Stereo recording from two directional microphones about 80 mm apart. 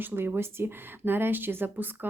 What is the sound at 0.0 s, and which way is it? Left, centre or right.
Speech, right.